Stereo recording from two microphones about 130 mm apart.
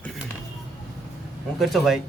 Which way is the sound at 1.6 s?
Centre (ahead or behind).